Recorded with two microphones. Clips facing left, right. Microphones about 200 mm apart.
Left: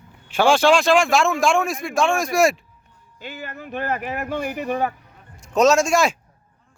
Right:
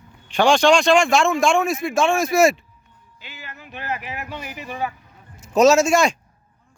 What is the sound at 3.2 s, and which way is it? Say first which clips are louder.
Speech: left 8 dB; 50° left (ahead or behind).